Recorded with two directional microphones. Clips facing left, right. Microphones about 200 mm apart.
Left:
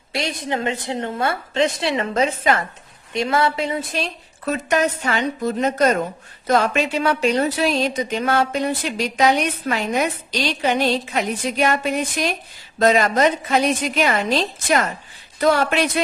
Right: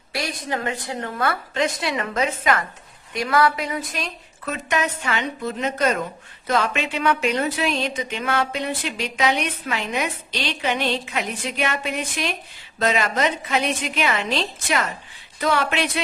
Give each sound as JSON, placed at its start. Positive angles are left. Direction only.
{"t": 0.1, "sound": "a woman's voice", "side_deg": 25}